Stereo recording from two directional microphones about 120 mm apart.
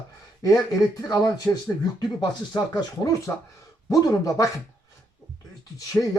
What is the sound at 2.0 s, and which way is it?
Speech, 35° left (ahead or behind).